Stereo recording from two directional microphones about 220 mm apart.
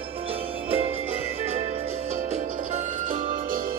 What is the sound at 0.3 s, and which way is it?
Music, 25° right (ahead or behind).